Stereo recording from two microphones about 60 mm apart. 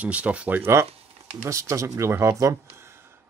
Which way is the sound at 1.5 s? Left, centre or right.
Right.